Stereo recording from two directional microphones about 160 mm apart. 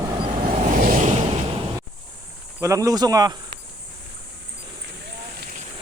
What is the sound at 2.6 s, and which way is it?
Speech, 20° right (ahead or behind).